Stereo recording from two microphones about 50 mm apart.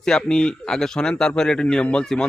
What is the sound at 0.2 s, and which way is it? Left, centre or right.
A man's voice, centre.